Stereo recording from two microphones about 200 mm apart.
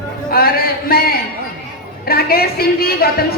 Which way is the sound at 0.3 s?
50° left (ahead or behind).